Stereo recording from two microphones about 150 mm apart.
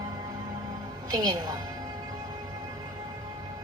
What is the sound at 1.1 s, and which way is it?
Speech, 25° right (ahead or behind).